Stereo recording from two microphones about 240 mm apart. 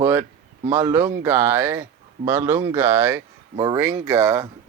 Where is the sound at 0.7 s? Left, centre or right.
Centre.